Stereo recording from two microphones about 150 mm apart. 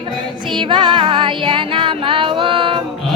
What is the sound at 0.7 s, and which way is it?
Music, 30° right (ahead or behind).